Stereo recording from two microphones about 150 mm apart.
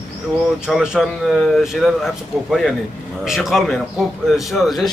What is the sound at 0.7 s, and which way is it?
A man's voice, centre (ahead or behind).